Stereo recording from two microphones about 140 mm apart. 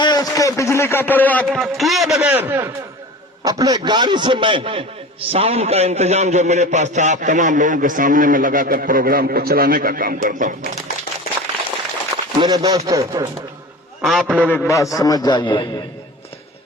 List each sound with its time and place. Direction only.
0.0 s a man's voice: 30° left (ahead or behind); by 1.5 s 10° left (ahead or behind)
1.5 s a man's voice: centre (ahead or behind)
3.4 s a man's voice: 30° right (ahead or behind); by 10.7 s 70° right (ahead or behind)
12.4 s speech: 30° right (ahead or behind)
14.0 s a man's voice: centre (ahead or behind)
14.7 s a man's voice: 25° left (ahead or behind)